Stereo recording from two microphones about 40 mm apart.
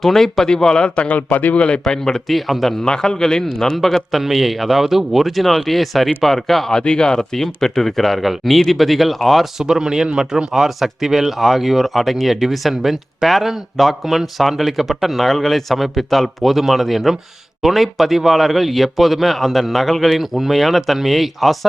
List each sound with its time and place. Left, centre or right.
0.0 s speech: centre
0.4 s speech: centre
1.0 s a man's voice: left
1.5 s speech: left
2.3 s speech: centre
2.8 s speech: centre
6.7 s speech: left
7.3 s speech: centre
9.6 s speech: centre